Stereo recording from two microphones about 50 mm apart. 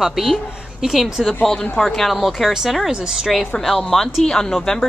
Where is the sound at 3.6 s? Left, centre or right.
Centre.